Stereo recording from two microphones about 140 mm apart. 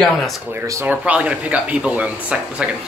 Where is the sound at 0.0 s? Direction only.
Centre (ahead or behind).